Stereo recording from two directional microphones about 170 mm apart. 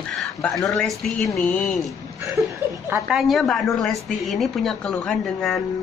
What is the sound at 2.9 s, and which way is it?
Speech, centre (ahead or behind).